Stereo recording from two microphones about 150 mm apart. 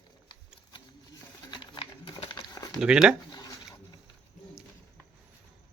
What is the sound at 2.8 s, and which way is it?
Speech, 5° right (ahead or behind).